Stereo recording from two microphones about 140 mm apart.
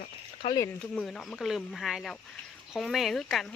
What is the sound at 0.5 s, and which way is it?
Speech, 20° left (ahead or behind).